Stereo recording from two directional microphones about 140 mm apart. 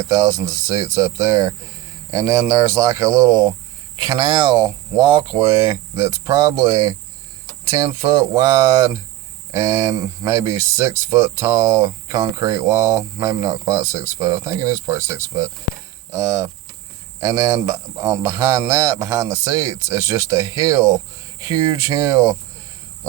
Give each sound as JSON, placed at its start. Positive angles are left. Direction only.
{"t": 0.0, "sound": "speech", "side_deg": -25}